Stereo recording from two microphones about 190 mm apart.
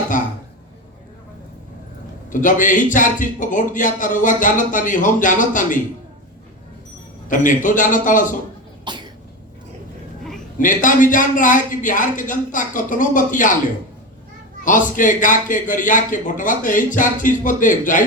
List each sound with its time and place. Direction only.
0.1 s throat clearing: 45° left (ahead or behind)
2.3 s a man's voice: 45° left (ahead or behind)
7.3 s a man's voice: 45° left (ahead or behind)
8.9 s cough: 25° right (ahead or behind)
10.6 s a man's voice: 45° left (ahead or behind)
14.6 s a man's voice: 45° left (ahead or behind)